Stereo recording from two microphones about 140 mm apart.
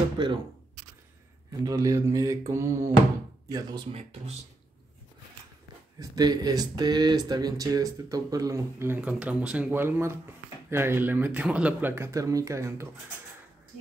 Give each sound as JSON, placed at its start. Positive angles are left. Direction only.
{"t": 0.2, "sound": "speech", "side_deg": -30}
{"t": 1.5, "sound": "speech", "side_deg": -25}
{"t": 5.9, "sound": "speech", "side_deg": -30}